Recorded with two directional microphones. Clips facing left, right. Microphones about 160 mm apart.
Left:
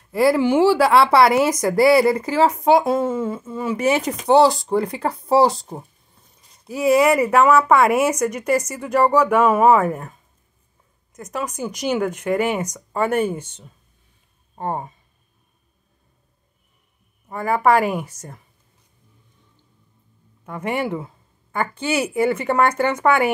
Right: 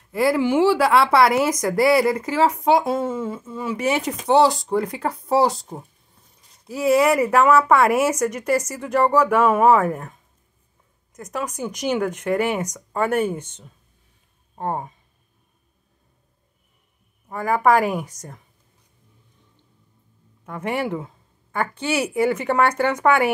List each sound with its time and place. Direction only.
0.1 s speech: 35° left (ahead or behind)
6.7 s speech: 15° left (ahead or behind)
11.3 s a woman's voice: 5° left (ahead or behind)
17.3 s a woman's voice: 5° left (ahead or behind)
20.4 s a woman's voice: 5° left (ahead or behind)